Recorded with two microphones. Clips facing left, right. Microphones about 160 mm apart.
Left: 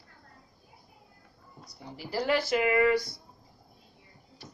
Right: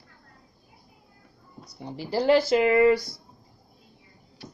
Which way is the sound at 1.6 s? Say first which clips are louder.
Right 7 dB; 25° right (ahead or behind).